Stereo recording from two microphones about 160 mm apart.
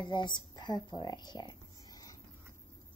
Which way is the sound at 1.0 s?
25° left (ahead or behind).